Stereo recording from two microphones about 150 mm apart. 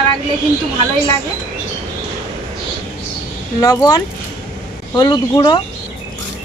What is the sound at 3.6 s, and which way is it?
Speech, 25° left (ahead or behind).